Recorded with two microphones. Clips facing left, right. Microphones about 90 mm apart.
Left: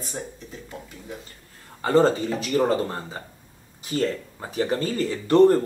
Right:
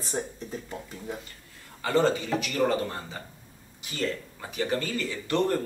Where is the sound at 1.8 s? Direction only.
35° left (ahead or behind).